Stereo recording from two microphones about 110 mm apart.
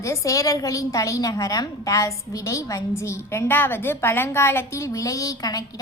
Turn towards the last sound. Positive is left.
turn(degrees=35)  # may be behind; listen again after turning